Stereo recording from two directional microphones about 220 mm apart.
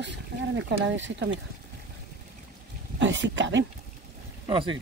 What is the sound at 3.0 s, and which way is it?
Speech, 55° right (ahead or behind).